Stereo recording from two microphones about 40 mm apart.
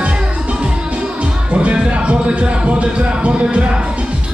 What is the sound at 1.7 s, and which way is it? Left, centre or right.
Music, right.